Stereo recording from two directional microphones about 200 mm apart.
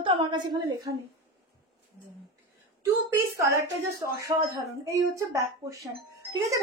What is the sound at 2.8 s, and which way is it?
Speech, 15° right (ahead or behind).